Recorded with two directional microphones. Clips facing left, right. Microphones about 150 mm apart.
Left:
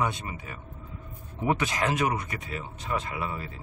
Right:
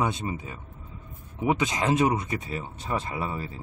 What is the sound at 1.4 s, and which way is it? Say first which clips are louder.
Speech: right 2 dB; 20° right (ahead or behind).